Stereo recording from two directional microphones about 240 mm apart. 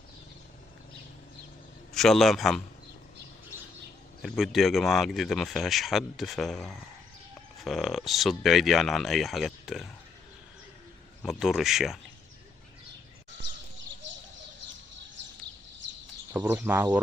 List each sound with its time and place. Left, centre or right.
1.9 s a man's voice: centre
4.2 s speech: centre
11.2 s speech: centre
14.0 s bird: right
15.2 s a sound: right
16.3 s speech: centre